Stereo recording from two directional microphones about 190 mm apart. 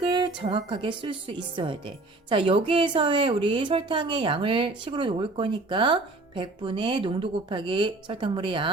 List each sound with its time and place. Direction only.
0.1 s a woman's voice: 25° right (ahead or behind)